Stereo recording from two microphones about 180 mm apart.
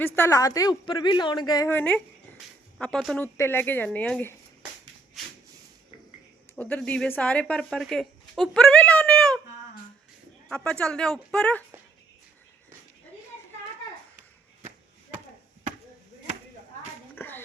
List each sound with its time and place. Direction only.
0.0 s a woman's voice: 15° left (ahead or behind)
3.3 s speech: 15° left (ahead or behind)
6.6 s speech: 5° left (ahead or behind)
10.5 s speech: 5° left (ahead or behind)
17.2 s a sound: 10° left (ahead or behind)